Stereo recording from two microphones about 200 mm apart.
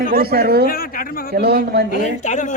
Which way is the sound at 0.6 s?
45° left (ahead or behind).